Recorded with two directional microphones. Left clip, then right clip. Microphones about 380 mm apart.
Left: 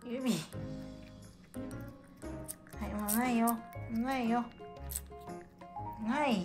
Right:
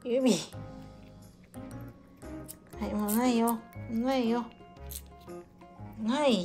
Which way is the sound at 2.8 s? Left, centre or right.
Centre.